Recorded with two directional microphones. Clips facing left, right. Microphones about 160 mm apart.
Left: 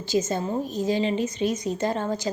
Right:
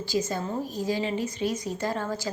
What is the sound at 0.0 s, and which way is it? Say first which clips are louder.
A woman's voice: left 3 dB; 20° left (ahead or behind).